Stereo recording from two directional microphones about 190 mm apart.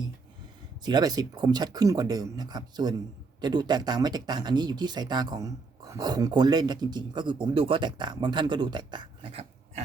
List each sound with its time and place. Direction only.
0.8 s speech: 20° right (ahead or behind)